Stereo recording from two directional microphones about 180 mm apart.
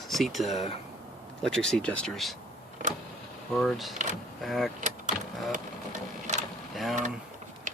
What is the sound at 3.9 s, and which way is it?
Speech, 45° right (ahead or behind).